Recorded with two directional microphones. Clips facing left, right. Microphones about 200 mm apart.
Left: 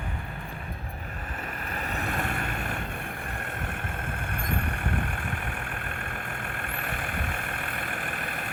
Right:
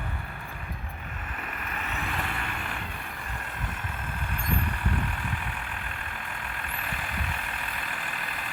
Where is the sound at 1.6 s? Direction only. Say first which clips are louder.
Left 3 dB; 35° left (ahead or behind).